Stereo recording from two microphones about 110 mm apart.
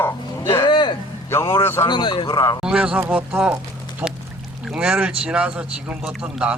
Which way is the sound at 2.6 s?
10° right (ahead or behind).